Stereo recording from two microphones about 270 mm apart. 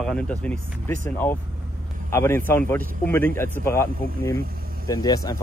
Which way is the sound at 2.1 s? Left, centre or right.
Centre.